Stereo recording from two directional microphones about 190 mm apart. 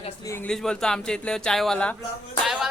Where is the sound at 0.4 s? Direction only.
5° left (ahead or behind).